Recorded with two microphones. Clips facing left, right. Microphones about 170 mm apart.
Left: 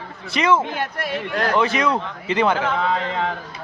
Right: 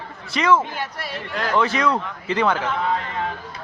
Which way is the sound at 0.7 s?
55° left (ahead or behind).